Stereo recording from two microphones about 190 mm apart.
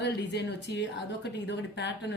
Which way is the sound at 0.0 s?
65° left (ahead or behind).